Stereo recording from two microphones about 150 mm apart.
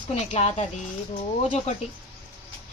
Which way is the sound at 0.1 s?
45° left (ahead or behind).